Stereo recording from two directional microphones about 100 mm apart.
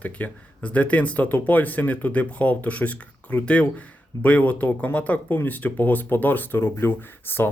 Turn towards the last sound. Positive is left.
turn(degrees=20)  # may be behind; listen again after turning